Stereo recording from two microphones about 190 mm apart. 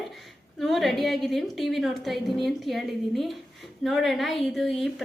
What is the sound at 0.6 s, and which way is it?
A woman's voice, centre (ahead or behind).